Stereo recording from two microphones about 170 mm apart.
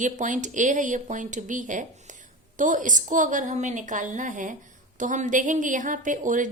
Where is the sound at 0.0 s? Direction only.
45° right (ahead or behind).